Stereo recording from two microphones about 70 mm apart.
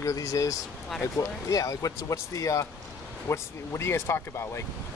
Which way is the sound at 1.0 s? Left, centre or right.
Left.